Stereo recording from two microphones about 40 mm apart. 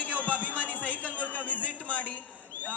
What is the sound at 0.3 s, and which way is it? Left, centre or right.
Music, left.